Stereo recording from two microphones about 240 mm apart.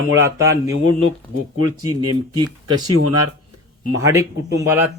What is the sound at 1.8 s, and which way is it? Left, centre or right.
Speech, centre.